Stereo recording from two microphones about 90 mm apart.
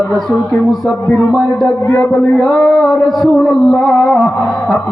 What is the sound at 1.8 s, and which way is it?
Speech, 30° left (ahead or behind).